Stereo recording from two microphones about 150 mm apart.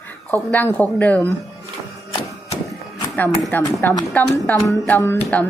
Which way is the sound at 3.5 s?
10° left (ahead or behind).